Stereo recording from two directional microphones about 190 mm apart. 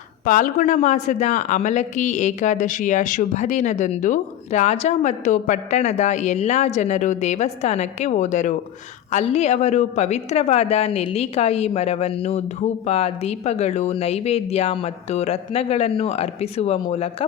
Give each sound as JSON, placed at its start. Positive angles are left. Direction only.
{"t": 0.3, "sound": "speech", "side_deg": 45}